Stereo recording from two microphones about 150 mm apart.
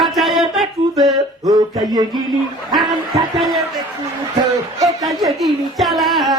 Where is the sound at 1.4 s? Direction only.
25° right (ahead or behind).